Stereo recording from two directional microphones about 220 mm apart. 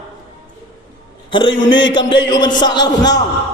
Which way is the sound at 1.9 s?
20° left (ahead or behind).